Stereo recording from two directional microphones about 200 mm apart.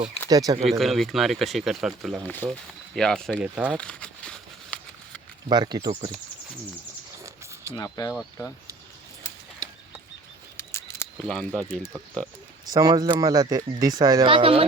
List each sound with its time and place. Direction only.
0.3 s speech: 20° right (ahead or behind)
0.7 s speech: centre (ahead or behind)
3.8 s a sound: 5° left (ahead or behind)
5.5 s speech: 20° right (ahead or behind)
7.8 s speech: 15° left (ahead or behind)
8.1 s speech: 5° left (ahead or behind)
9.6 s bird flight: 20° right (ahead or behind)
10.6 s camera: 10° left (ahead or behind)
11.2 s speech: 5° left (ahead or behind)
12.7 s speech: 20° right (ahead or behind)